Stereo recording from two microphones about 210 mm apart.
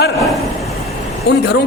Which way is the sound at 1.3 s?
50° left (ahead or behind).